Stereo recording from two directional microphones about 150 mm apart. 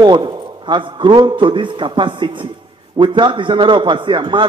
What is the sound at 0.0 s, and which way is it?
A man's voice, 30° right (ahead or behind).